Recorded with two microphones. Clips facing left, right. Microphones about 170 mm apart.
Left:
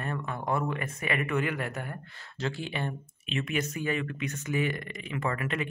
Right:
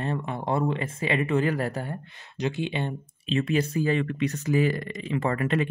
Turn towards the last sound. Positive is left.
turn(degrees=-35)  # may be behind; listen again after turning